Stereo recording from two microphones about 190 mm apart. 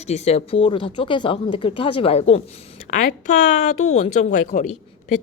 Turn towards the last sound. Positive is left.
turn(degrees=35)  # may be behind; listen again after turning